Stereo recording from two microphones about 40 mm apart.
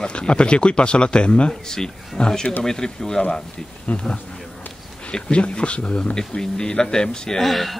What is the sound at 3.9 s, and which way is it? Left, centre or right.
Speech, left.